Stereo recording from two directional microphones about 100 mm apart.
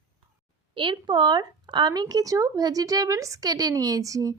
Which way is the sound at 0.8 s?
50° right (ahead or behind).